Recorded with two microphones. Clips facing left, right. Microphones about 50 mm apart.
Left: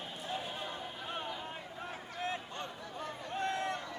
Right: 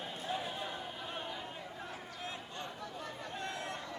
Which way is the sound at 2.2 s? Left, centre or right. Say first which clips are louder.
Left 6 dB; left.